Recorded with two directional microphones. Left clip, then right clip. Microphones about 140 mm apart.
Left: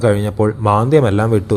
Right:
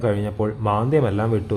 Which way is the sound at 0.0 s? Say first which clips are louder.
Left 8 dB; 30° left (ahead or behind).